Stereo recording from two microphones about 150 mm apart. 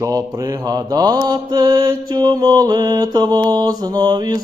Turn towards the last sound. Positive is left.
turn(degrees=-25)  # may be behind; listen again after turning